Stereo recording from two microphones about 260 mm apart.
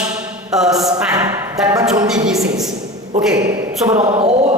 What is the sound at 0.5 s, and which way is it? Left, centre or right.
Speech, centre.